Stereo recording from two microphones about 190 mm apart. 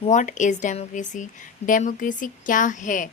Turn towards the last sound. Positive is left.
turn(degrees=45)  # may be behind; listen again after turning